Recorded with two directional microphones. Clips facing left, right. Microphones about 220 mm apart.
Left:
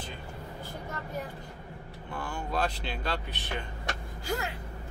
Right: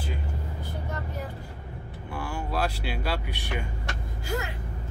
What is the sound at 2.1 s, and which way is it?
Speech, 10° right (ahead or behind).